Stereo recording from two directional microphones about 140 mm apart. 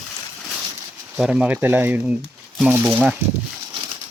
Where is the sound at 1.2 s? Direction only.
5° right (ahead or behind).